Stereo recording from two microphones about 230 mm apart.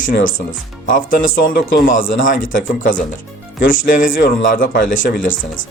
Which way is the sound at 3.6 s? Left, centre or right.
Left.